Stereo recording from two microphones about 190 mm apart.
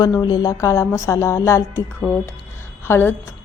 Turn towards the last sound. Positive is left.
turn(degrees=10)  # may be behind; listen again after turning